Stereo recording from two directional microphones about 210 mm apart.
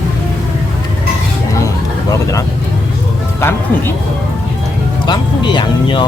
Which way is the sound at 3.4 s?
10° left (ahead or behind).